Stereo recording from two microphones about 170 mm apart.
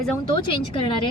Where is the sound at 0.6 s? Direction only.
30° left (ahead or behind).